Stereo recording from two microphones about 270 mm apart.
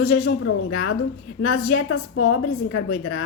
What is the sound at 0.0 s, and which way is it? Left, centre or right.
A woman's voice, left.